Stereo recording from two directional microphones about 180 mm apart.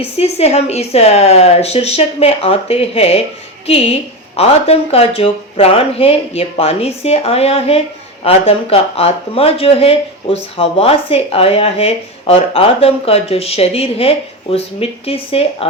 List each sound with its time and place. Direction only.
0.2 s speech: 35° left (ahead or behind)